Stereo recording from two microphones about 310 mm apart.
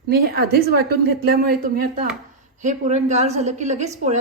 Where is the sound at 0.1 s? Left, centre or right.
Right.